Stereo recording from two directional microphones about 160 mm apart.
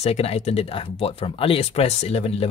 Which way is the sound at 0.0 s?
40° left (ahead or behind).